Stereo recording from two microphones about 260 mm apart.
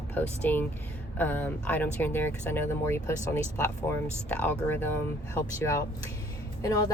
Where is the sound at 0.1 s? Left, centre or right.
Centre.